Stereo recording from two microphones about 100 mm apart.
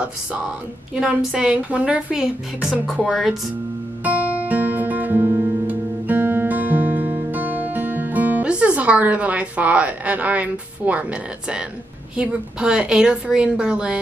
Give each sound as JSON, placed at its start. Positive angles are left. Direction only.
{"t": 1.0, "sound": "speech", "side_deg": -5}
{"t": 4.0, "sound": "guitar", "side_deg": -15}
{"t": 12.2, "sound": "speech", "side_deg": -10}